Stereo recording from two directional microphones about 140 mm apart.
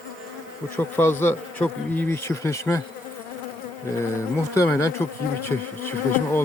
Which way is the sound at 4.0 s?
20° left (ahead or behind).